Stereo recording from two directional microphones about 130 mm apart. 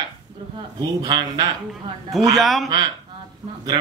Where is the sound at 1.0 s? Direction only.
30° right (ahead or behind).